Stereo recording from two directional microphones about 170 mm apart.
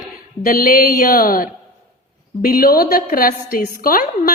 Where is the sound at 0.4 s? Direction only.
55° left (ahead or behind).